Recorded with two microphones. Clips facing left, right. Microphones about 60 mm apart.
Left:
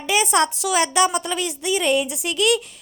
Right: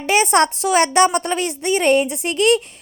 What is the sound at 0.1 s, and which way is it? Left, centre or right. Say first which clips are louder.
A woman's voice: right 4 dB; right.